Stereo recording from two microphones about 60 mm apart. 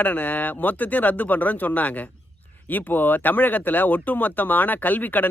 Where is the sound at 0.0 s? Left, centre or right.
Left.